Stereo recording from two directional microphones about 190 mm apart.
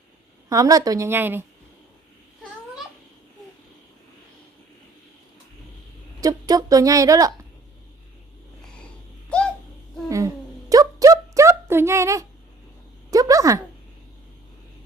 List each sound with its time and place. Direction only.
0.4 s a woman's voice: 20° right (ahead or behind)
6.1 s a woman's voice: 20° right (ahead or behind)
10.1 s a sound: 15° right (ahead or behind)